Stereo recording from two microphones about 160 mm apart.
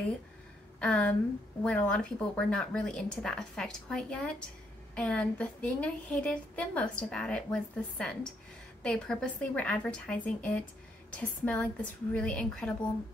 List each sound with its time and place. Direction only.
0.7 s a woman's voice: 10° left (ahead or behind)